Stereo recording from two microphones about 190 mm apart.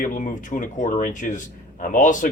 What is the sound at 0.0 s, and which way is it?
Speech, 45° left (ahead or behind).